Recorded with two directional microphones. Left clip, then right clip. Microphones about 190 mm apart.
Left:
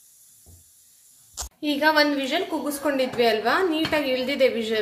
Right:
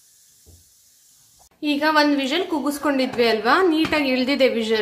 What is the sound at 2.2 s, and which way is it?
A woman's voice, 25° right (ahead or behind).